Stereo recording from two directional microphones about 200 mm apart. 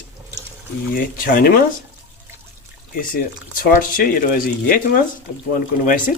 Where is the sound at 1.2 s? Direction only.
45° left (ahead or behind).